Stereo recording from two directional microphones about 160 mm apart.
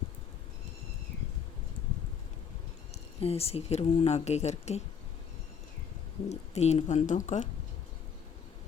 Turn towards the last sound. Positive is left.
turn(degrees=50)  # may be behind; listen again after turning